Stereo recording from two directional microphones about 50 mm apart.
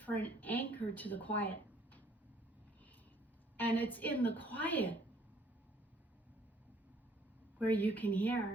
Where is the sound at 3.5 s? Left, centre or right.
Left.